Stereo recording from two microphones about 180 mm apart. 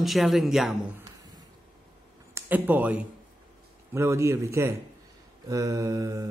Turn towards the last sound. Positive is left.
turn(degrees=-15)  # may be behind; listen again after turning